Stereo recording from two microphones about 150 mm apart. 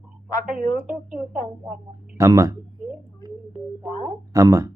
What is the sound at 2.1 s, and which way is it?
Speech, 20° right (ahead or behind).